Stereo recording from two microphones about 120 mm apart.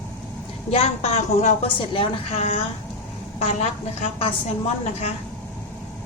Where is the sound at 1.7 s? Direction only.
45° left (ahead or behind); by 3.6 s 65° left (ahead or behind).